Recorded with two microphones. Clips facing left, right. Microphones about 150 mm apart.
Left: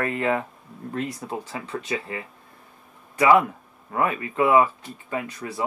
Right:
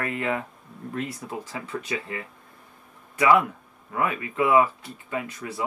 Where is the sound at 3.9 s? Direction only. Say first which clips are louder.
Left 2 dB; 35° left (ahead or behind).